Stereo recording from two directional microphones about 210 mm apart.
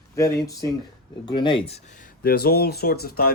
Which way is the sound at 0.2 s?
15° left (ahead or behind).